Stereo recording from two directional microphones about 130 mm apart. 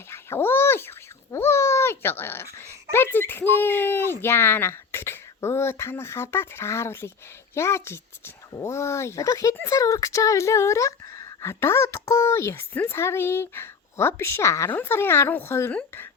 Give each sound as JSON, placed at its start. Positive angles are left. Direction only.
{"t": 0.1, "sound": "speech", "side_deg": 20}